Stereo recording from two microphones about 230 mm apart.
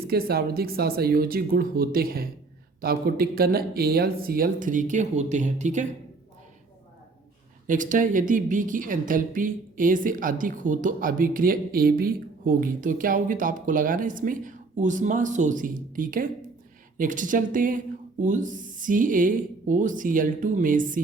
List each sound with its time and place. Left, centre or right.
0.0 s a woman's voice: right
7.7 s a woman's voice: right